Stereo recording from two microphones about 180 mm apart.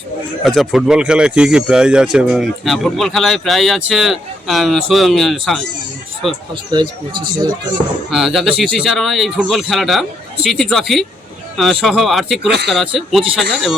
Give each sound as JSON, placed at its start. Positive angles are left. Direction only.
{"t": 0.4, "sound": "speech", "side_deg": 0}
{"t": 6.7, "sound": "speech", "side_deg": -25}
{"t": 8.1, "sound": "speech", "side_deg": 0}
{"t": 12.5, "sound": "speech", "side_deg": -70}
{"t": 12.7, "sound": "speech", "side_deg": 0}